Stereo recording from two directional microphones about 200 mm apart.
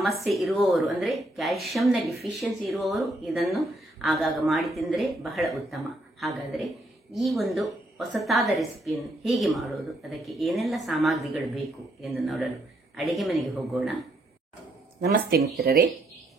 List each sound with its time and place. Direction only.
0.0 s speech: centre (ahead or behind)
15.6 s speech: 45° right (ahead or behind)